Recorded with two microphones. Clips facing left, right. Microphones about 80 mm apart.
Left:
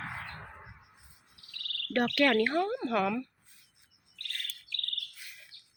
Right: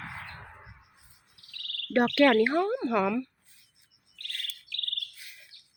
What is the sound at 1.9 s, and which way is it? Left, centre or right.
Speech, centre.